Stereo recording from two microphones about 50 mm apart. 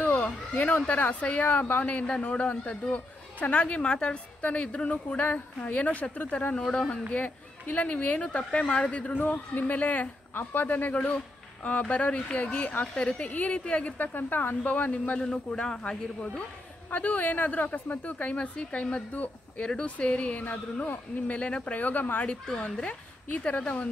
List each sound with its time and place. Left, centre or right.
0.0 s a sound: left
0.8 s a woman's voice: left
11.0 s a woman's voice: left
13.9 s speech: left
14.6 s a woman's voice: left
15.1 s a man's voice: centre
16.9 s a woman's voice: left
19.6 s a woman's voice: left